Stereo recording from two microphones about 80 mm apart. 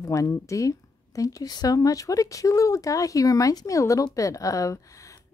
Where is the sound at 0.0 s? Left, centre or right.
Left.